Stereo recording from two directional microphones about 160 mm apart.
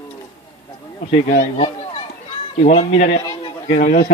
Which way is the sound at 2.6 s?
45° left (ahead or behind).